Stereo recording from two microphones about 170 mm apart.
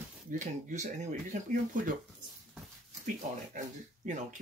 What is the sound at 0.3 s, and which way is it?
Speech, 50° right (ahead or behind).